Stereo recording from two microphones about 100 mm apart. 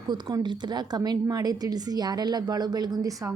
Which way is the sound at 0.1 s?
45° right (ahead or behind).